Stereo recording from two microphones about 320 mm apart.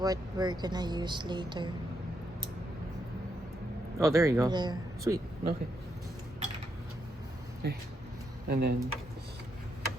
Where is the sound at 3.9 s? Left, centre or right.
Centre.